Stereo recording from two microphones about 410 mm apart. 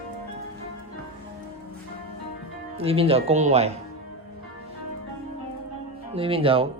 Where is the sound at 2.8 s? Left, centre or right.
Centre.